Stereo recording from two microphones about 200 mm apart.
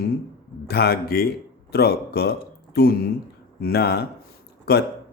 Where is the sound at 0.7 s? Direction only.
50° left (ahead or behind).